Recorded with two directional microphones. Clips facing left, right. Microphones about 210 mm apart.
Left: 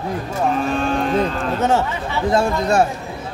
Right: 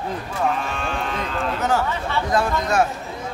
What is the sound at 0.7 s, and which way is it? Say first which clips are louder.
Cattle: left 8 dB; 40° left (ahead or behind).